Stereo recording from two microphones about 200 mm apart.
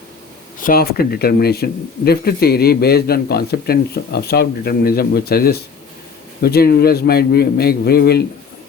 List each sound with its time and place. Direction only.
0.6 s speech: 45° left (ahead or behind)